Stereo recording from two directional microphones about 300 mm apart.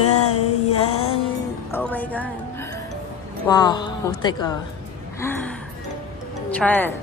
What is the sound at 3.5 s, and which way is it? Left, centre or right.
A woman's voice, centre.